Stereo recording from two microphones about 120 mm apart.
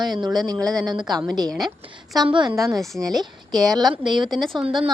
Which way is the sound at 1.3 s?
35° right (ahead or behind).